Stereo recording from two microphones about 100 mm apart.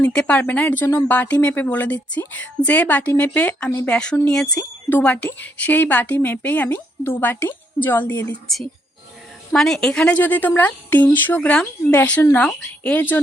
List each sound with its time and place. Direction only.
0.0 s a woman's voice: 10° left (ahead or behind)
4.9 s a woman's voice: 15° left (ahead or behind)
9.5 s a woman's voice: 5° left (ahead or behind)